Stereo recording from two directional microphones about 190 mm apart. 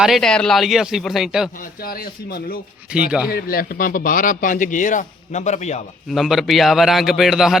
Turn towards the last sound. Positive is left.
turn(degrees=0)  # may be behind; listen again after turning